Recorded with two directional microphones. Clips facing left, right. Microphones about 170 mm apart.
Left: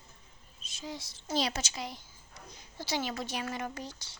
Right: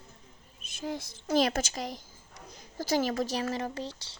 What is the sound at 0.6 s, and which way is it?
Speech, 55° right (ahead or behind).